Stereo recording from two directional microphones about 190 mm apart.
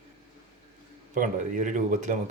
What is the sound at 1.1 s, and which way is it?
Dishes, 40° right (ahead or behind).